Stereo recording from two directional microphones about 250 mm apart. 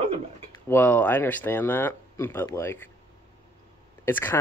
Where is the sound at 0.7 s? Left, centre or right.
Centre.